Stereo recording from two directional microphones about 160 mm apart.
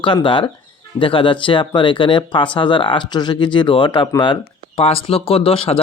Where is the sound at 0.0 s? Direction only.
30° left (ahead or behind).